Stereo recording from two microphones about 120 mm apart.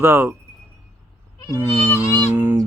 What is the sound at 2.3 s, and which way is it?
Honk, 15° right (ahead or behind).